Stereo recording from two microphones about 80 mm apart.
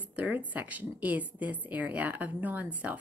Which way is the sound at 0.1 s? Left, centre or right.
Centre.